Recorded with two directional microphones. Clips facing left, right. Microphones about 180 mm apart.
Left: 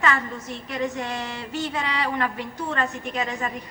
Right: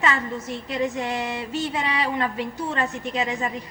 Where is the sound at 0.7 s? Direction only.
20° right (ahead or behind).